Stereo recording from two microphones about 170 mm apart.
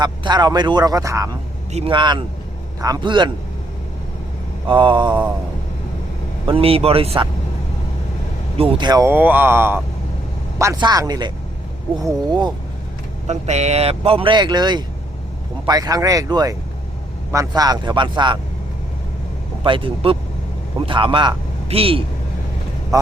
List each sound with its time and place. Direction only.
0.0 s speech: 25° right (ahead or behind)
1.7 s speech: 30° right (ahead or behind)
4.7 s speech: 30° right (ahead or behind)
6.5 s speech: 35° right (ahead or behind)
8.5 s speech: 30° right (ahead or behind)
13.2 s speech: 40° right (ahead or behind)
19.6 s a man's voice: 30° right (ahead or behind)